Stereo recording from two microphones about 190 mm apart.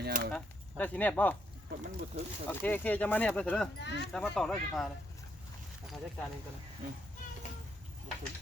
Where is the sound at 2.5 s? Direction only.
10° left (ahead or behind).